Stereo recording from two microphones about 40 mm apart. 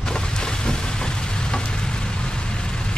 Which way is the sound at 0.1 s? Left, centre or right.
Centre.